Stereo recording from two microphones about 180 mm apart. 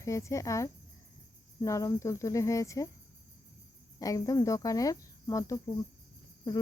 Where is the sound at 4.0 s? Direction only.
20° left (ahead or behind).